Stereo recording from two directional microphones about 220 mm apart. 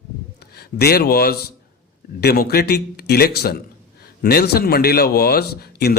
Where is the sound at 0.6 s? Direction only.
45° left (ahead or behind).